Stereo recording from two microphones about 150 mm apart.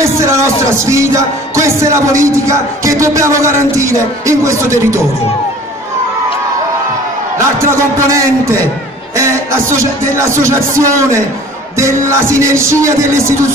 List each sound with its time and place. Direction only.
0.0 s music: 20° right (ahead or behind)
7.3 s a man's voice: 20° right (ahead or behind)
9.1 s music: 20° right (ahead or behind)